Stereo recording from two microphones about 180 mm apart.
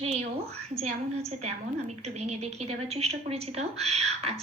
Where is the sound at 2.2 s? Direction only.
35° right (ahead or behind).